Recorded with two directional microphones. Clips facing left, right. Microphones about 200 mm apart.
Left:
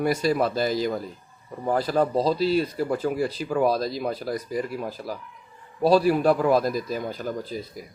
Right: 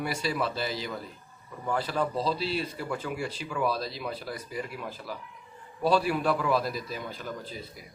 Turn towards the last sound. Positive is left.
turn(degrees=40)  # may be behind; listen again after turning